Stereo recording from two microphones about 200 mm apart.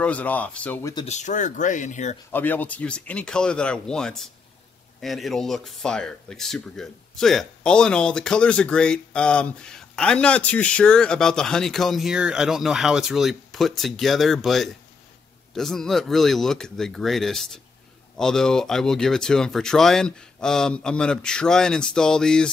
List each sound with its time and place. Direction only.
0.0 s speech: 5° left (ahead or behind)
0.9 s speech: 35° left (ahead or behind)
2.3 s speech: 10° left (ahead or behind)